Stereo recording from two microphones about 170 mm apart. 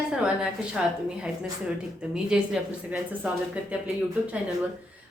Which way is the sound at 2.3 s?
5° right (ahead or behind).